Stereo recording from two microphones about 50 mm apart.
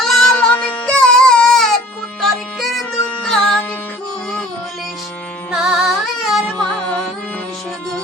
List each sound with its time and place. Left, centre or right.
0.0 s music: centre
0.5 s music: left
0.9 s music: centre
3.2 s music: centre
5.5 s music: centre
6.7 s carnatic music: left